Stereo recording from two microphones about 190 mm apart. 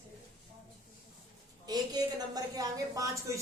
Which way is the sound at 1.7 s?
20° right (ahead or behind).